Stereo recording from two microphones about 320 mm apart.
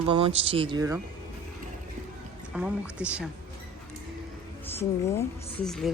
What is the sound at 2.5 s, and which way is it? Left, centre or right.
Speech, centre.